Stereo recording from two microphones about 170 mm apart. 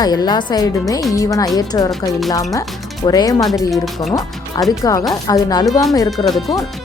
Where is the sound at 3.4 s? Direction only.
Centre (ahead or behind).